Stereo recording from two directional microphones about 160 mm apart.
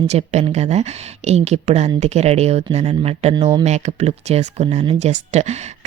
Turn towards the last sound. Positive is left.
turn(degrees=-45)  # may be behind; listen again after turning